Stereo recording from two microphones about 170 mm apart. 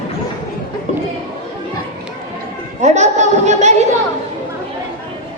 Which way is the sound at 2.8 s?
40° right (ahead or behind).